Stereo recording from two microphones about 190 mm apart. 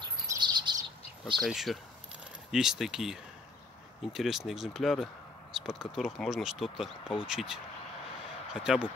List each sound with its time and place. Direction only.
0.4 s chirp: 25° right (ahead or behind)
1.2 s speech: centre (ahead or behind)
8.5 s speech: 5° right (ahead or behind)